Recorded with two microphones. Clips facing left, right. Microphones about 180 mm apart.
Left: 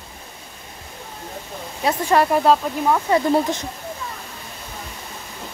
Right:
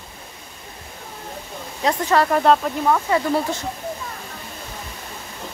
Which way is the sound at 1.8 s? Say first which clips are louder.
Left 1 dB; 10° left (ahead or behind).